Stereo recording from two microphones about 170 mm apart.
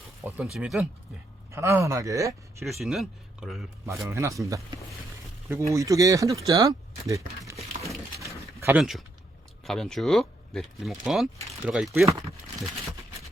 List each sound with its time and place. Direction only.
0.5 s speech: 5° right (ahead or behind)
1.5 s speech: 15° right (ahead or behind)
2.6 s speech: centre (ahead or behind)
4.1 s speech: 15° right (ahead or behind)
8.2 s a sound: 15° right (ahead or behind)
8.8 s speech: centre (ahead or behind)